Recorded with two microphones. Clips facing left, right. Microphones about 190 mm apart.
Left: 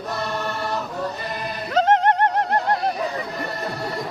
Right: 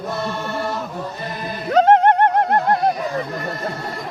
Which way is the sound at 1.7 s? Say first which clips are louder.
Right 5 dB; 50° right (ahead or behind).